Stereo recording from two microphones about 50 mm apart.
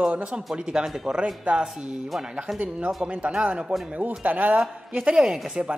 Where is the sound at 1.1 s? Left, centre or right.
Right.